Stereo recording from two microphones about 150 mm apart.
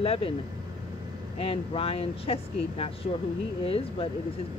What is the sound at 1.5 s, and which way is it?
Speech, 40° left (ahead or behind).